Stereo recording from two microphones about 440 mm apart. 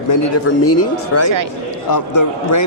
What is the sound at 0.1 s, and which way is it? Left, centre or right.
A man's voice, left.